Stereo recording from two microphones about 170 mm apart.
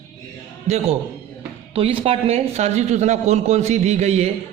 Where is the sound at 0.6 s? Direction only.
40° right (ahead or behind).